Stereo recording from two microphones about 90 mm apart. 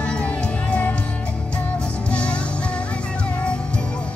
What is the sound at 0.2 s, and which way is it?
Music, 15° left (ahead or behind).